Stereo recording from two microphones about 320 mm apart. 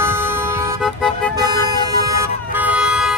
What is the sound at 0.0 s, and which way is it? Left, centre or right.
Toot, centre.